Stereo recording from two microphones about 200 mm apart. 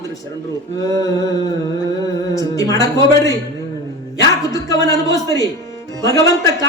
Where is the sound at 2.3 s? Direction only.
15° left (ahead or behind).